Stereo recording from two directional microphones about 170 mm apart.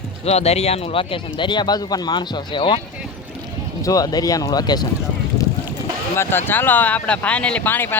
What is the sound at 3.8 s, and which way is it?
Speech, 20° left (ahead or behind).